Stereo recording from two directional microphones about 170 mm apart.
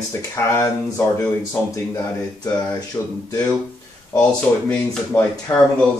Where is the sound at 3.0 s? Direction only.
15° left (ahead or behind).